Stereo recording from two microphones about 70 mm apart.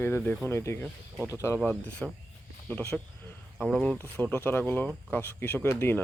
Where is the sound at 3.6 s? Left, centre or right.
Centre.